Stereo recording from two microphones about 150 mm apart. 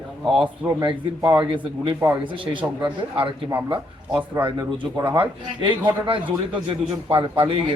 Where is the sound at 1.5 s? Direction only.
30° right (ahead or behind).